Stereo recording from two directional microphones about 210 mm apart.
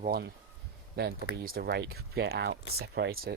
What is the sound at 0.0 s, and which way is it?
Speech, 45° right (ahead or behind).